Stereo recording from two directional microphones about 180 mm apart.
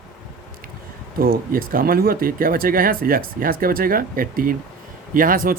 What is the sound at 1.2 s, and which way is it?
Speech, 55° right (ahead or behind).